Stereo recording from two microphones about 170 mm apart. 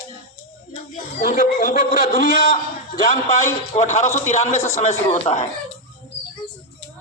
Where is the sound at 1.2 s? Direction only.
55° left (ahead or behind).